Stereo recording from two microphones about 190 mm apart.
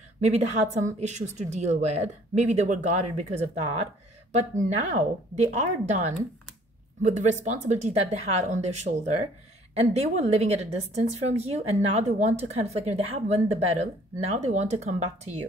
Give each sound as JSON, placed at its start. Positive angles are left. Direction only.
{"t": 0.2, "sound": "a woman's voice", "side_deg": -35}